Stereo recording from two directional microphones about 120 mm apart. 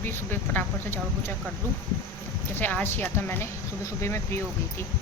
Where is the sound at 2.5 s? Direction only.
15° left (ahead or behind).